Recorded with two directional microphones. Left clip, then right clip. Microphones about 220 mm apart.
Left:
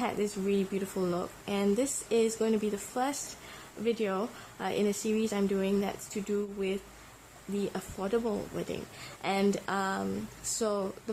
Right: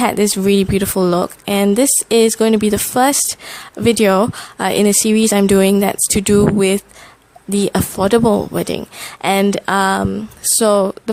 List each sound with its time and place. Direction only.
0.0 s speech: 45° right (ahead or behind)